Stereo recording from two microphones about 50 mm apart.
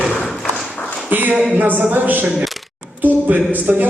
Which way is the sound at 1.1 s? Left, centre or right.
Right.